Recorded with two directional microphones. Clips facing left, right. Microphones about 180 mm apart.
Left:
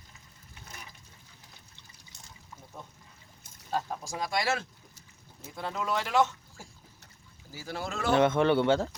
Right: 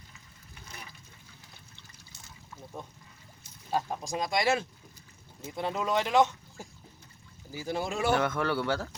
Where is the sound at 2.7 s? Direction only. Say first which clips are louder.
Right 4 dB; 15° right (ahead or behind).